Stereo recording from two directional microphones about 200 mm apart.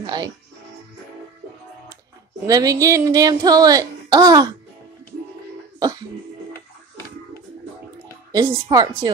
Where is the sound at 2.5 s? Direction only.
20° right (ahead or behind).